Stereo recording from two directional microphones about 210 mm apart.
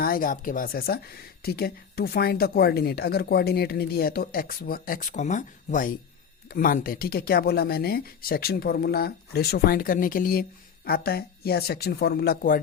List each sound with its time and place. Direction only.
0.0 s speech: 40° left (ahead or behind)